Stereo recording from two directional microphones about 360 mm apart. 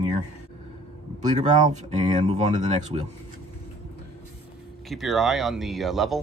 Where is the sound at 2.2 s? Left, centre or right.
Centre.